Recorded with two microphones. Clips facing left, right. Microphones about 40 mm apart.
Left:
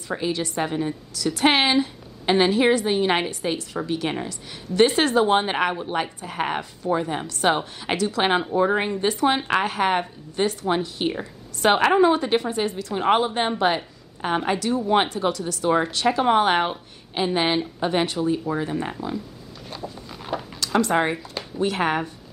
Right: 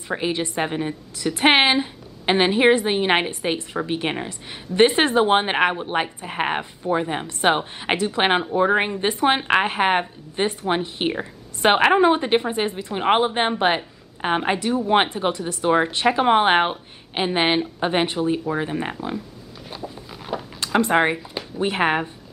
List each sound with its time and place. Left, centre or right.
0.1 s a woman's voice: right
19.7 s a sound: centre
20.6 s a woman's voice: right